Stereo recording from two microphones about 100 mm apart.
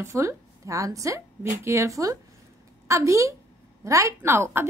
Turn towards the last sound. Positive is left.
turn(degrees=-25)  # may be behind; listen again after turning